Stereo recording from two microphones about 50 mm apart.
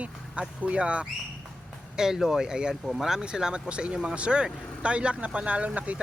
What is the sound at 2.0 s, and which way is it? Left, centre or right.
Speech, centre.